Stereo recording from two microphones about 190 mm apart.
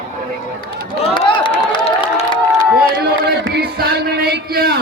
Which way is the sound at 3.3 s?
60° right (ahead or behind).